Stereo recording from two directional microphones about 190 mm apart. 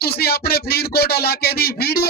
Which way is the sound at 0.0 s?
55° left (ahead or behind).